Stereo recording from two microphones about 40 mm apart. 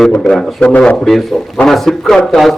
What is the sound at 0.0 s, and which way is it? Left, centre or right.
Speech, centre.